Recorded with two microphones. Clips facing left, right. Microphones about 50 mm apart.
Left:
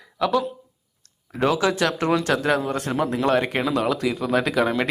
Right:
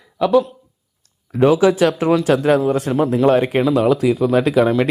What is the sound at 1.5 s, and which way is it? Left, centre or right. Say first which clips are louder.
Speech: right 7 dB; centre.